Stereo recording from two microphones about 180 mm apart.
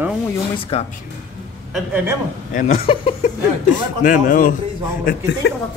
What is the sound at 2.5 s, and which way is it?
Speech, 45° left (ahead or behind).